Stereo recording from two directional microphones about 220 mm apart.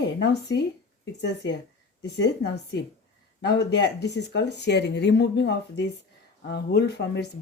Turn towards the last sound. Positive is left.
turn(degrees=50)  # may be behind; listen again after turning